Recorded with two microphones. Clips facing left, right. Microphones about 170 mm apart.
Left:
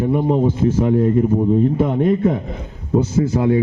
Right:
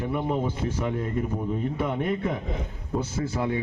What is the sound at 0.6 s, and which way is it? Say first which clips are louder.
Speech: left 12 dB; 45° left (ahead or behind).